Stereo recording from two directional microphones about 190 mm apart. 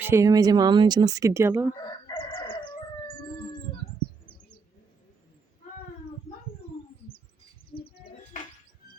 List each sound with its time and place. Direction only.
0.0 s speech: 15° right (ahead or behind)
1.9 s chicken: 25° left (ahead or behind)